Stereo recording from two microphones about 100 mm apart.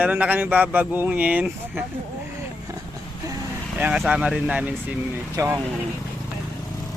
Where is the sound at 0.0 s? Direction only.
15° right (ahead or behind).